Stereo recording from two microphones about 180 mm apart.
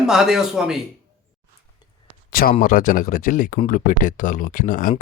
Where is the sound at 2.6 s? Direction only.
50° left (ahead or behind).